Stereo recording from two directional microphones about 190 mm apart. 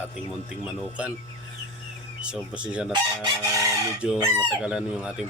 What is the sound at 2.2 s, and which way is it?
Speech, 5° right (ahead or behind).